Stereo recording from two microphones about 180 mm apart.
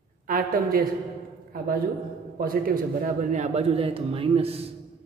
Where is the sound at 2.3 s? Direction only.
55° right (ahead or behind); by 4.7 s 35° right (ahead or behind).